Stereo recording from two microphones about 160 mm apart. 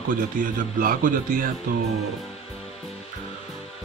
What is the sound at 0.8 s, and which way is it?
Speech, 60° right (ahead or behind).